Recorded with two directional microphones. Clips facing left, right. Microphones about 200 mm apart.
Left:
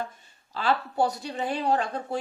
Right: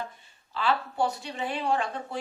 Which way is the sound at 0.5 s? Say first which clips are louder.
Left 2 dB; 40° left (ahead or behind).